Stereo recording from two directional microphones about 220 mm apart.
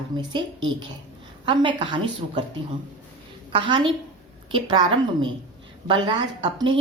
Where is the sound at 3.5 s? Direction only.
20° right (ahead or behind).